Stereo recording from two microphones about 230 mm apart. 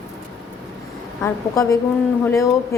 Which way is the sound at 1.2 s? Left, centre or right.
Centre.